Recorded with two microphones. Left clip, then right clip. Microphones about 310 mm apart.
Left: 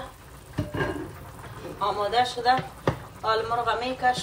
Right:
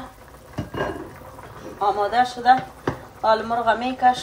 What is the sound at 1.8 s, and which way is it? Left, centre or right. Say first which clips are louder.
A woman's voice: right 4 dB; right.